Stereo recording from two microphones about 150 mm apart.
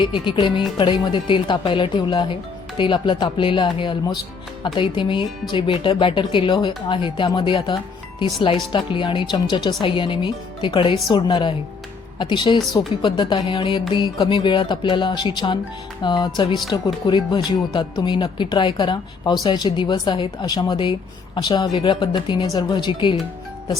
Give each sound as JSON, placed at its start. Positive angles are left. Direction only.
{"t": 0.0, "sound": "speech", "side_deg": 35}
{"t": 16.0, "sound": "music", "side_deg": 30}
{"t": 16.4, "sound": "speech", "side_deg": 30}